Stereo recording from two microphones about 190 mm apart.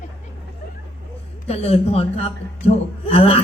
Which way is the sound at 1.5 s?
30° left (ahead or behind).